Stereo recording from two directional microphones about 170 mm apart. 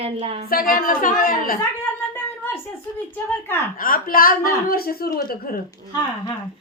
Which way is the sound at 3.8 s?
55° left (ahead or behind).